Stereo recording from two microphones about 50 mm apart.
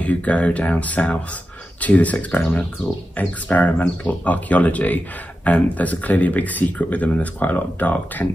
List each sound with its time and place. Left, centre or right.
0.0 s speech: left
3.2 s speech: left